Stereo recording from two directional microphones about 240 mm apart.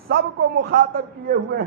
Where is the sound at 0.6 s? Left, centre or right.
Right.